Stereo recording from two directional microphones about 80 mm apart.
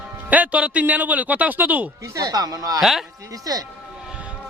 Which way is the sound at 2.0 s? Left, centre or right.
Right.